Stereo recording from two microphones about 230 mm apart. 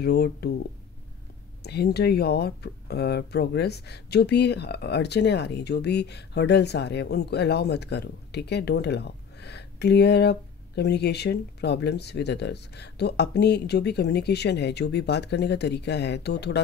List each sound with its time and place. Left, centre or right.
0.0 s speech: left
1.6 s speech: left